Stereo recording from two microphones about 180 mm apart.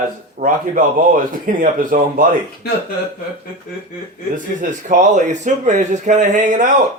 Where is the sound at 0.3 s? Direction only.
45° right (ahead or behind).